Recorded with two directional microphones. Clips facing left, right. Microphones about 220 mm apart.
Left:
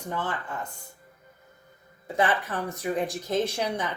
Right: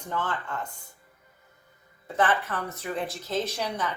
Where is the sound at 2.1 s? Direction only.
10° left (ahead or behind).